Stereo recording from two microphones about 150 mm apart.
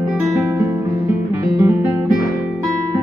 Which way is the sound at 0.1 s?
15° right (ahead or behind).